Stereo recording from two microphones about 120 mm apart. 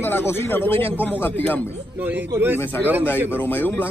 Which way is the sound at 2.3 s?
15° right (ahead or behind).